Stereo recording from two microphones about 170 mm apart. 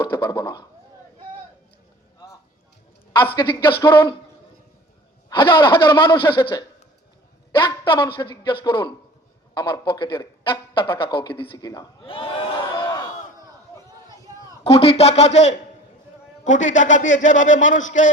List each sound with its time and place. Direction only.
0.0 s a man's voice: 25° left (ahead or behind)
3.3 s a man's voice: 25° left (ahead or behind)
5.3 s a man's voice: 25° left (ahead or behind)
14.6 s speech: 35° left (ahead or behind)
16.6 s a man's voice: 45° left (ahead or behind)